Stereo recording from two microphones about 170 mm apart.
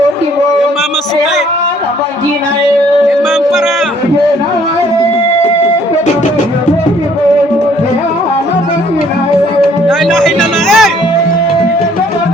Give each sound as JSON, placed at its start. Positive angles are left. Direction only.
{"t": 10.1, "sound": "music", "side_deg": 5}